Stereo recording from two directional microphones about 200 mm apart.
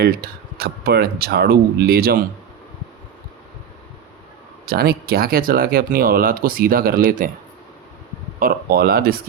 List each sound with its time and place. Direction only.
0.0 s speech: 50° right (ahead or behind)
4.6 s speech: 50° right (ahead or behind)
8.4 s speech: 45° right (ahead or behind)